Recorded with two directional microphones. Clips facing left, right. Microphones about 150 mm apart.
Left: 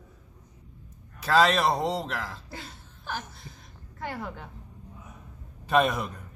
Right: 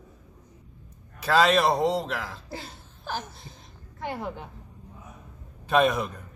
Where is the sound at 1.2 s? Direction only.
Centre (ahead or behind).